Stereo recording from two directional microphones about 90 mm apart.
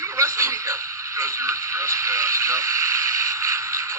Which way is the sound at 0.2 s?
30° right (ahead or behind).